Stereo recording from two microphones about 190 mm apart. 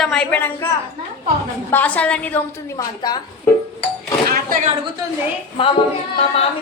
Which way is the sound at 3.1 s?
20° left (ahead or behind).